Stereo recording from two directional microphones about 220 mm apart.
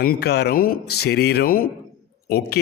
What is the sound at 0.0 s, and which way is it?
Speech, 45° left (ahead or behind).